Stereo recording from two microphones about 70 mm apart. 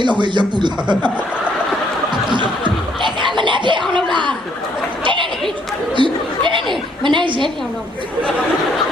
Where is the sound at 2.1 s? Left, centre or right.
Right.